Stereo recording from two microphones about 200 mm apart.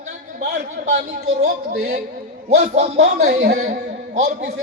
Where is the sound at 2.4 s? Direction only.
35° right (ahead or behind).